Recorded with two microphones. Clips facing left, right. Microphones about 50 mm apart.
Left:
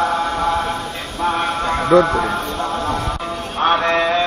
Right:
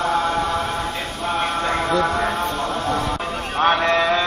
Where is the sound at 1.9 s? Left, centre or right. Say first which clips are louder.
Left 9 dB; left.